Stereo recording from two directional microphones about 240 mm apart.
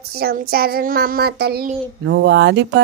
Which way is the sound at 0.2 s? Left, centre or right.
Right.